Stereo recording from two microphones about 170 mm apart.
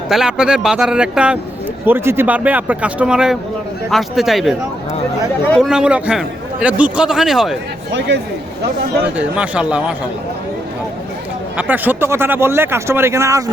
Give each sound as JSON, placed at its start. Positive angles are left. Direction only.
{"t": 0.1, "sound": "a man's voice", "side_deg": -5}
{"t": 5.5, "sound": "a man's voice", "side_deg": -5}
{"t": 7.9, "sound": "speech", "side_deg": -90}
{"t": 9.1, "sound": "speech", "side_deg": -5}
{"t": 11.5, "sound": "speech", "side_deg": -10}